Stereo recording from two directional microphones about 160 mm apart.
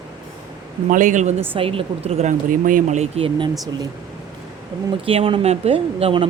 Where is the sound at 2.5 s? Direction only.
55° right (ahead or behind).